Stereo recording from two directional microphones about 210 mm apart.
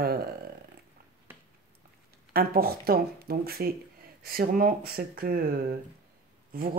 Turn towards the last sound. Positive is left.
turn(degrees=-45)  # may be behind; listen again after turning